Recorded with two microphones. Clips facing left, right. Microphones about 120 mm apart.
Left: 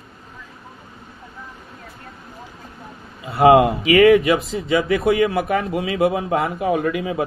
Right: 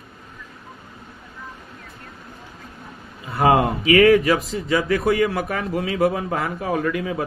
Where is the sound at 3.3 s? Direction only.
25° left (ahead or behind).